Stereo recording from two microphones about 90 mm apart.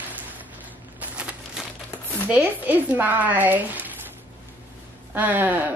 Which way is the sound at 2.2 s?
20° right (ahead or behind).